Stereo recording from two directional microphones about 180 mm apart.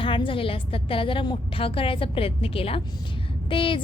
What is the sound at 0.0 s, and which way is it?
A woman's voice, 30° left (ahead or behind).